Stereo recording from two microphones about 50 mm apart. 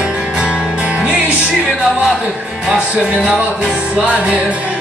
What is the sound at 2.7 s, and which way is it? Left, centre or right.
Music, right.